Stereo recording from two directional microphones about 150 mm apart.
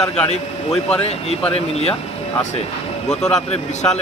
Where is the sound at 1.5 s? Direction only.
40° left (ahead or behind).